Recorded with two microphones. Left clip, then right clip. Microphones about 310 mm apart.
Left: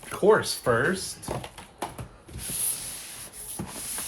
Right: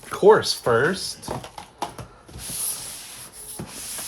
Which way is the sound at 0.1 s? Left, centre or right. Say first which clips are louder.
Right 6 dB; right.